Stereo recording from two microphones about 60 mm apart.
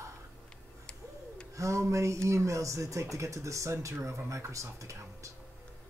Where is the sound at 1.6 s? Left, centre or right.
Right.